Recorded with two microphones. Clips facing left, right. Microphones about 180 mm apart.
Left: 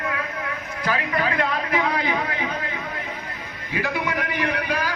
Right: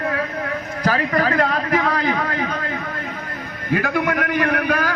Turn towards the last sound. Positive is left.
turn(degrees=-55)  # may be behind; listen again after turning